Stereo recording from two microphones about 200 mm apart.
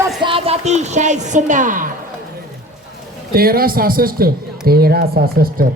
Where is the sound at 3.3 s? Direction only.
50° right (ahead or behind).